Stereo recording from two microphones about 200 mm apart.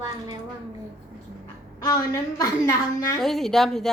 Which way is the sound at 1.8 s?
20° left (ahead or behind).